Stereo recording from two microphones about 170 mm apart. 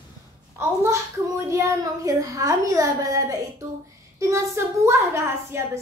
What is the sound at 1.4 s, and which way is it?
A woman's voice, 20° right (ahead or behind).